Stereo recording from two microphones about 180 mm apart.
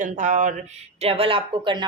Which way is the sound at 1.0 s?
30° right (ahead or behind).